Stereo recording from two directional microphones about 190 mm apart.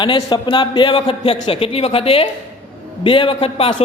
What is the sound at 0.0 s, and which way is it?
A man's voice, 25° left (ahead or behind).